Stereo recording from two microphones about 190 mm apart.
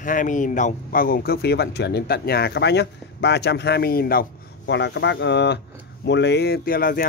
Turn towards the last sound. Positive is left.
turn(degrees=50)  # may be behind; listen again after turning